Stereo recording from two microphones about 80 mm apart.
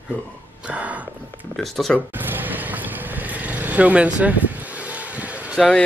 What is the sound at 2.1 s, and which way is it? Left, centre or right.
Vehicle, right.